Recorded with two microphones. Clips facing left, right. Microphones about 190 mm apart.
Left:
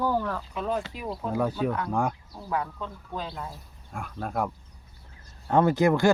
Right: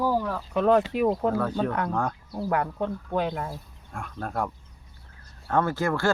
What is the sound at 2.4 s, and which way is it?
Speech, 65° right (ahead or behind).